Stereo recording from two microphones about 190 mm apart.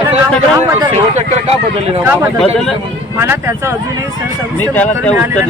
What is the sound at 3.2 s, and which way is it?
Speech, 15° right (ahead or behind).